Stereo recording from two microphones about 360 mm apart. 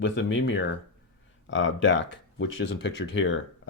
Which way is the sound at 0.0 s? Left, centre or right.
Left.